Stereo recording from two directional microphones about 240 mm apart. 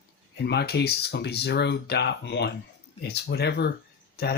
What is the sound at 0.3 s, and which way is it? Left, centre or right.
Speech, left.